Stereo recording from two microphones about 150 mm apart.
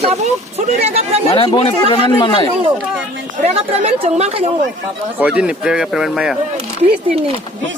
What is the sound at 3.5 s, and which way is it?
Speech, 45° right (ahead or behind).